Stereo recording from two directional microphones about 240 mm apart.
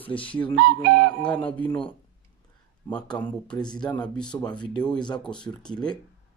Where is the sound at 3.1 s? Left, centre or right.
Centre.